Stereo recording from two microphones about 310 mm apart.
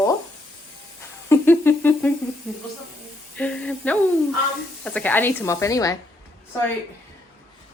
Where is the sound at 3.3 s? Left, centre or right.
Centre.